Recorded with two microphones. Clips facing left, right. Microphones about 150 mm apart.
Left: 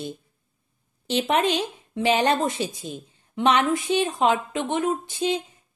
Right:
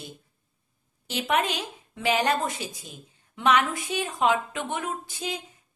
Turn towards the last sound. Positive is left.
turn(degrees=25)  # may be behind; listen again after turning